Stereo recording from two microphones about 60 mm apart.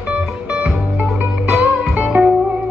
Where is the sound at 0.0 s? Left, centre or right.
Centre.